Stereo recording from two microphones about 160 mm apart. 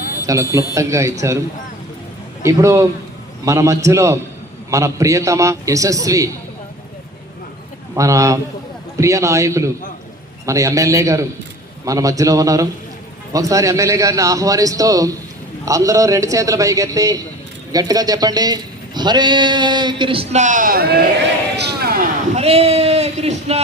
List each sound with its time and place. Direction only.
0.2 s a man's voice: 20° right (ahead or behind)
2.4 s a man's voice: 20° right (ahead or behind)
7.9 s a man's voice: 20° right (ahead or behind)
20.4 s a man's voice: 55° right (ahead or behind); by 21.0 s 75° right (ahead or behind)
21.5 s a sound: 80° right
22.4 s speech: 40° right (ahead or behind)